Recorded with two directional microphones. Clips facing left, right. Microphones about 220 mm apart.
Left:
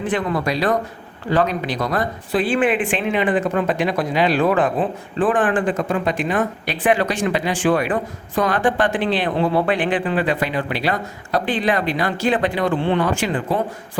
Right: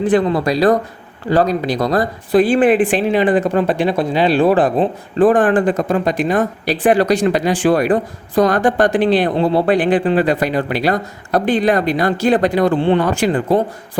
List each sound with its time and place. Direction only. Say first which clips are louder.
0.0 s a woman's voice: right 7 dB; 35° right (ahead or behind)